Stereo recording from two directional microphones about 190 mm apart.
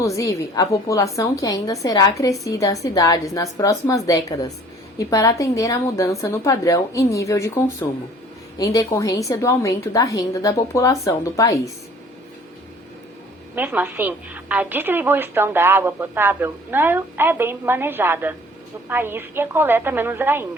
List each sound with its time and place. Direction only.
0.0 s a woman's voice: 15° left (ahead or behind)
13.6 s a woman's voice: 10° right (ahead or behind)